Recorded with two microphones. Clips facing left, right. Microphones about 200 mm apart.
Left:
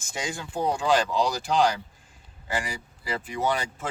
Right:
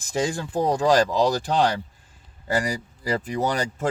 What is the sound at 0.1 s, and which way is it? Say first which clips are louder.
Speech: right 8 dB; 40° right (ahead or behind).